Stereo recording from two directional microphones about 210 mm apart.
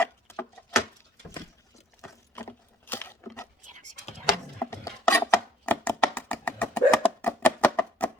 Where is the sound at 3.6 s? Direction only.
35° right (ahead or behind).